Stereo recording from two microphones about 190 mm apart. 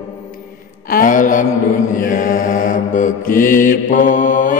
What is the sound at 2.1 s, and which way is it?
Mantra, 45° left (ahead or behind).